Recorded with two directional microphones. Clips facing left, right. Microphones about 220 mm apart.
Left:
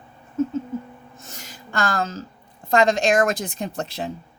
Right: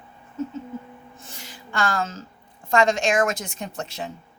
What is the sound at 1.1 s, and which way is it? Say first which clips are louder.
Speech: left 1 dB; 40° left (ahead or behind).